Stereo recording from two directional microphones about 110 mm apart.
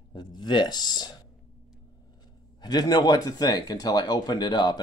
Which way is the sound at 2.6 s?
40° left (ahead or behind).